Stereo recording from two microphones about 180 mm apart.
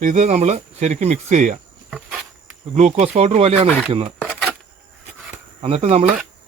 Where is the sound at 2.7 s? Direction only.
40° right (ahead or behind).